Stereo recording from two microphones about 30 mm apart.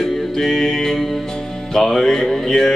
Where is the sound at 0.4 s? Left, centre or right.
Centre.